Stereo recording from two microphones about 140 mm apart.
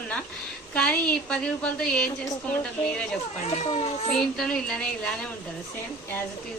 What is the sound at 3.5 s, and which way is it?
Speech, 50° left (ahead or behind).